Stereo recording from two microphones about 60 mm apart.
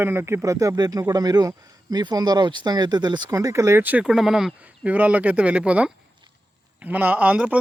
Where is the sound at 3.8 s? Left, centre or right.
Right.